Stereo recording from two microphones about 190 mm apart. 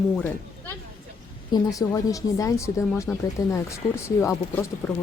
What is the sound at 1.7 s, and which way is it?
Speech, 20° left (ahead or behind).